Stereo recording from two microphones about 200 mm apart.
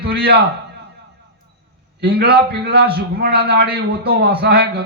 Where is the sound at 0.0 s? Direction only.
50° right (ahead or behind).